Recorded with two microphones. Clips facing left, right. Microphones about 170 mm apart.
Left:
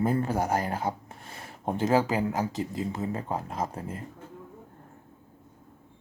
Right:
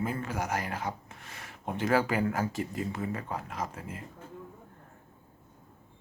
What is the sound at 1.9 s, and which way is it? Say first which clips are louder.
Speech: left 1 dB; 20° left (ahead or behind).